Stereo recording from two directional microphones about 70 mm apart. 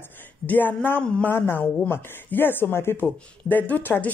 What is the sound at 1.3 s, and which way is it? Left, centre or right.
A woman's voice, left.